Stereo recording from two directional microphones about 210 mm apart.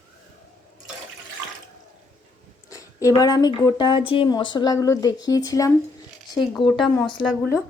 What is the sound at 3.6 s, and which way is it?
Speech, 20° left (ahead or behind).